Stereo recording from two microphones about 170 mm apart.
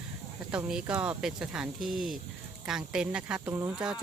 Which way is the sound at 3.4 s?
15° right (ahead or behind).